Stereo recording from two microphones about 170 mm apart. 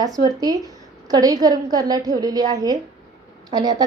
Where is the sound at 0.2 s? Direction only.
20° right (ahead or behind).